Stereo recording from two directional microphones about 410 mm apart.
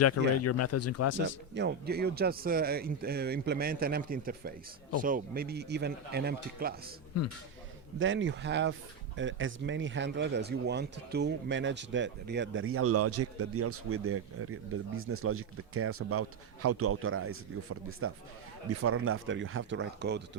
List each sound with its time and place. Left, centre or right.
0.0 s speech: left
1.2 s speech: right
7.9 s speech: right